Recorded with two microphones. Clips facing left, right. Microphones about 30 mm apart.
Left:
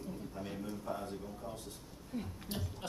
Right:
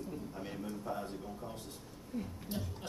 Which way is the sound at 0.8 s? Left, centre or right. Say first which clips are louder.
Right 1 dB; centre.